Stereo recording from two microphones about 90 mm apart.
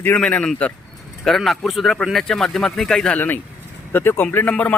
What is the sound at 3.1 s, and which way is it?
Speech, 20° left (ahead or behind).